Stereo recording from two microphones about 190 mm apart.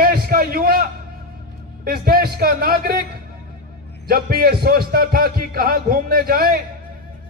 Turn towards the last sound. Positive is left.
turn(degrees=-50)  # may be behind; listen again after turning